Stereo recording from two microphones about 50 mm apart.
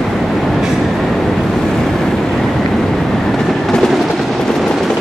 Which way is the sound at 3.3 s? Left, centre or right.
Centre.